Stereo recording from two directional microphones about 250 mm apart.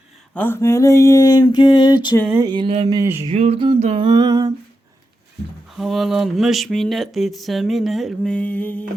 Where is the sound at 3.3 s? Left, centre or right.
Right.